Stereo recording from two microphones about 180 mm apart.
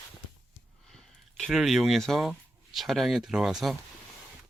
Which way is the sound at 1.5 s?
Centre (ahead or behind).